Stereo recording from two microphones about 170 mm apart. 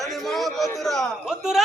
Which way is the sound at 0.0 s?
Centre (ahead or behind).